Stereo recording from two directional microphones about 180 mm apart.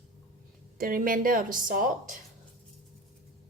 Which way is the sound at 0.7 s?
50° right (ahead or behind).